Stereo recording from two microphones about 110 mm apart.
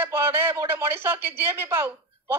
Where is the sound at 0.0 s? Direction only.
20° right (ahead or behind).